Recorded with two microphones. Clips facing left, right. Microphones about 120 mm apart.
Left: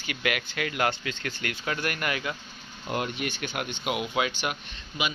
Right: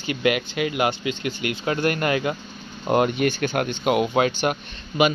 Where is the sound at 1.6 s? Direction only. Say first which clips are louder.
Right 8 dB; 30° right (ahead or behind).